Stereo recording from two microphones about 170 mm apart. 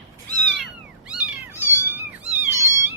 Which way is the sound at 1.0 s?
5° right (ahead or behind).